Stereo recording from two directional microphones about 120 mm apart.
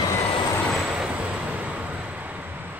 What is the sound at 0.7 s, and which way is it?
Vehicle, 5° right (ahead or behind).